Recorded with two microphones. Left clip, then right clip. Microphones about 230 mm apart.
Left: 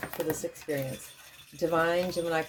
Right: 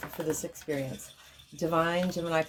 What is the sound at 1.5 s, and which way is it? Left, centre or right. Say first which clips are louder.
Speech: left 1 dB; right.